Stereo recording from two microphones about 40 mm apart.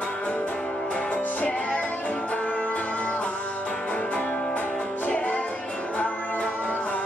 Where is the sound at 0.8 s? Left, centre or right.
Left.